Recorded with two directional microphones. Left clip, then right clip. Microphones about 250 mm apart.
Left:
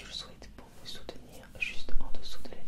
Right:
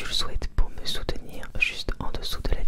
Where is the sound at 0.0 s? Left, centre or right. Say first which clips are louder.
Right 13 dB; right.